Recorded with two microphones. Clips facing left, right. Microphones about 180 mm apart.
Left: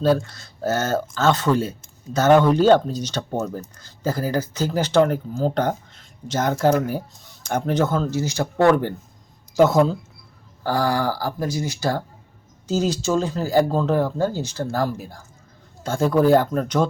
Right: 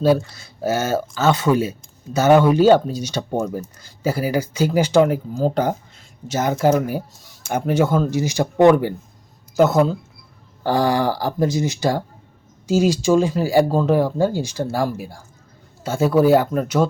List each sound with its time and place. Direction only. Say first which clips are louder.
0.0 s speech: right 2 dB; 10° right (ahead or behind)
9.6 s speech: even; centre (ahead or behind)
10.6 s speech: right 3 dB; 20° right (ahead or behind)